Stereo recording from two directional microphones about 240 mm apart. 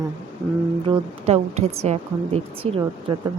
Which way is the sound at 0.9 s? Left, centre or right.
Right.